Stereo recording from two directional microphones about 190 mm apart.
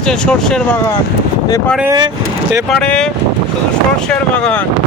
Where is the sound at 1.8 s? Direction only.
20° right (ahead or behind).